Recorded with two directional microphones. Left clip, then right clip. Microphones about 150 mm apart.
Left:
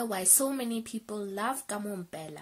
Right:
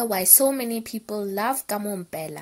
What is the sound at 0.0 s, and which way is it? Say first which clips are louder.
A woman's voice: right 8 dB; 30° right (ahead or behind).